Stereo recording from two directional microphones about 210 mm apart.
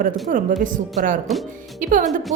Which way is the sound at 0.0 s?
40° right (ahead or behind).